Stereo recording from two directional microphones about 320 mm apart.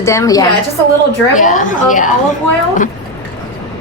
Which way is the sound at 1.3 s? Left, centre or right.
Left.